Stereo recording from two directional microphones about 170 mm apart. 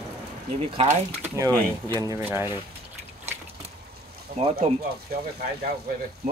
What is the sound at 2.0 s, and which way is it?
Speech, 20° right (ahead or behind).